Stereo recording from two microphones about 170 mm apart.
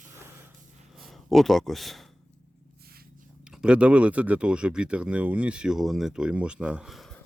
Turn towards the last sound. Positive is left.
turn(degrees=0)  # may be behind; listen again after turning